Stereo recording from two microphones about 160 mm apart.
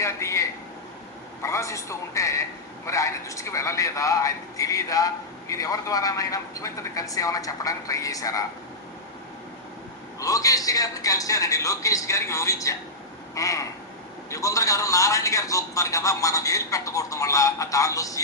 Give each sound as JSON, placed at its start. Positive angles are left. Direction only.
{"t": 0.0, "sound": "a sound", "side_deg": 20}
{"t": 1.4, "sound": "a woman's voice", "side_deg": 20}
{"t": 10.2, "sound": "a man's voice", "side_deg": 20}